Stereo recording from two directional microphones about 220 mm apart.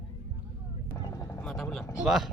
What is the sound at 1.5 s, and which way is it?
Speech, 5° left (ahead or behind).